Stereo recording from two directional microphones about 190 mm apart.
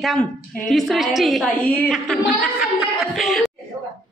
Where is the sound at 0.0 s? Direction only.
Centre (ahead or behind).